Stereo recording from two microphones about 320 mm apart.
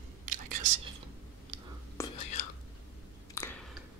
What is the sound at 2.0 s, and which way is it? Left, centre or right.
Whispering, centre.